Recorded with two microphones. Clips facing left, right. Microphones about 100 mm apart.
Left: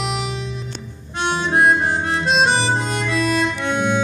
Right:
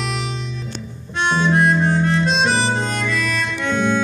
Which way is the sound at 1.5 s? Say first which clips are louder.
Left 2 dB; 20° left (ahead or behind).